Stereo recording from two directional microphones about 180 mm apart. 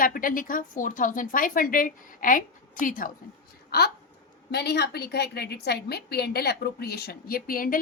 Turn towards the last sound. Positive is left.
turn(degrees=55)  # may be behind; listen again after turning